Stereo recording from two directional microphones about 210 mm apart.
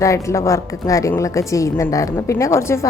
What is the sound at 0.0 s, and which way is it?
A woman's voice, 15° left (ahead or behind).